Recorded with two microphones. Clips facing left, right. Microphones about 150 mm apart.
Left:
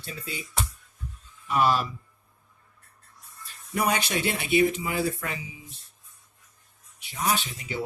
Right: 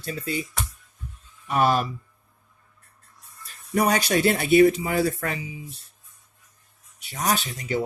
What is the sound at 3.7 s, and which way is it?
Speech, 40° right (ahead or behind).